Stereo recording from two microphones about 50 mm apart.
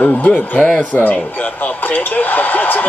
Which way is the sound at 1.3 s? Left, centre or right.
Left.